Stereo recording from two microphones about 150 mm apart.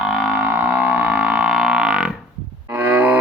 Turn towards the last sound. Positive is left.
turn(degrees=-15)  # may be behind; listen again after turning